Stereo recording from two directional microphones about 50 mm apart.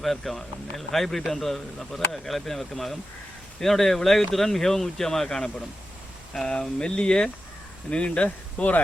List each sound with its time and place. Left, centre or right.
0.0 s speech: centre; by 8.8 s left